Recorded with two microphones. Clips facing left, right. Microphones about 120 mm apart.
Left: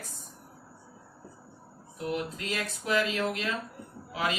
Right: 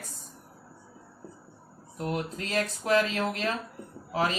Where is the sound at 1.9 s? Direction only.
50° right (ahead or behind).